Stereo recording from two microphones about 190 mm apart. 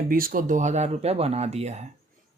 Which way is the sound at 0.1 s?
50° right (ahead or behind).